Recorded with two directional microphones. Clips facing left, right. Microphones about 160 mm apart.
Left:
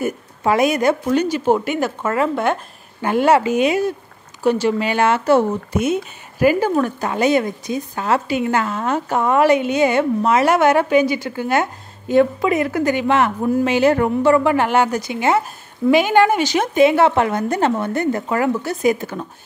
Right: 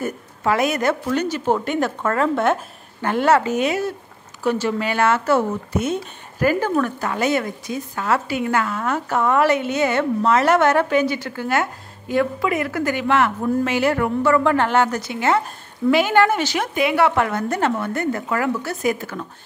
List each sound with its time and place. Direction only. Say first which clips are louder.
0.0 s a woman's voice: left 3 dB; 15° left (ahead or behind); by 2.6 s centre (ahead or behind)
3.0 s speech: left 2 dB; 15° left (ahead or behind)